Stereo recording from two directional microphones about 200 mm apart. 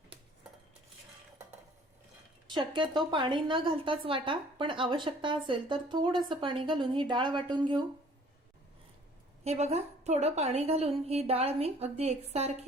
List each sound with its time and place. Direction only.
2.7 s speech: 25° right (ahead or behind)
9.4 s a woman's voice: 35° right (ahead or behind)